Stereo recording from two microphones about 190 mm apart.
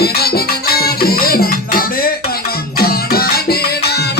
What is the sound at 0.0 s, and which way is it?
Music, 55° left (ahead or behind).